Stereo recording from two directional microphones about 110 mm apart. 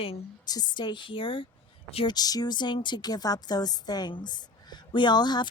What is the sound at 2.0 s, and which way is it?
A woman's voice, 35° left (ahead or behind).